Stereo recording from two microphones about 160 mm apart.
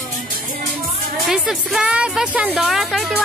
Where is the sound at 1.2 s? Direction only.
Centre (ahead or behind).